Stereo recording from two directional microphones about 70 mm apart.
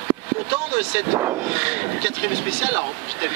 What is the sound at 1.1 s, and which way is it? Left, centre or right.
Speech, right.